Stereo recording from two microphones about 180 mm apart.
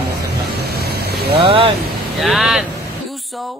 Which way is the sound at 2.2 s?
Centre (ahead or behind).